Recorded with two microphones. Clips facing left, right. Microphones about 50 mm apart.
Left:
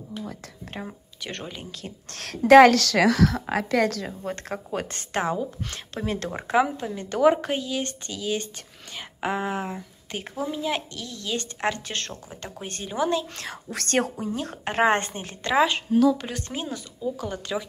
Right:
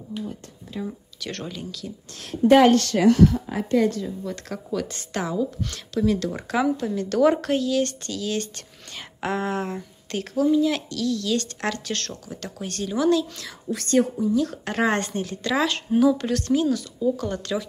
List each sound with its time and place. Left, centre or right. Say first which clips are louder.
0.8 s a woman's voice: right 3 dB; centre
1.7 s a woman's voice: right 3 dB; left
2.0 s a woman's voice: even; left
4.2 s a woman's voice: even; left; by 10.2 s centre
10.3 s a woman's voice: right 8 dB; left
13.4 s a woman's voice: right 3 dB; left
14.3 s a woman's voice: right 4 dB; left
15.9 s a woman's voice: right 3 dB; centre
16.2 s a woman's voice: right 10 dB; centre
17.0 s speech: right 3 dB; centre